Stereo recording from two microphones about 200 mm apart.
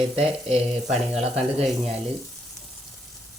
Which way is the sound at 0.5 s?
Centre (ahead or behind).